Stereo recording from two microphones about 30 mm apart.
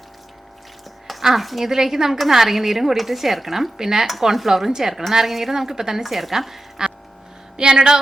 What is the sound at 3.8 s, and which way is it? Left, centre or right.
Speech, centre.